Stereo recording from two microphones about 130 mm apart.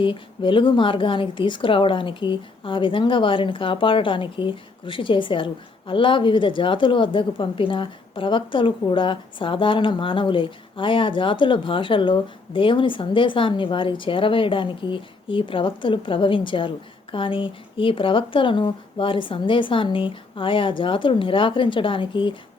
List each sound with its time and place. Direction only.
0.0 s speech: 40° left (ahead or behind)